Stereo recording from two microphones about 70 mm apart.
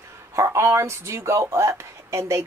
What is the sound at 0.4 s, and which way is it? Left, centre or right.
Speech, right.